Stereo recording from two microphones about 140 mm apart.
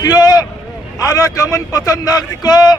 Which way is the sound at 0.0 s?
30° left (ahead or behind).